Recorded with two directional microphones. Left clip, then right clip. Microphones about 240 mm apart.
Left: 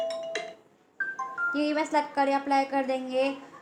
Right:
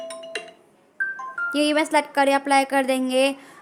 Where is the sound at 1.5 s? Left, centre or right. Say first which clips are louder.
Right 8 dB; right.